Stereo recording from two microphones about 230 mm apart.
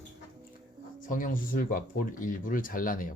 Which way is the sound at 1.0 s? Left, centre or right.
Left.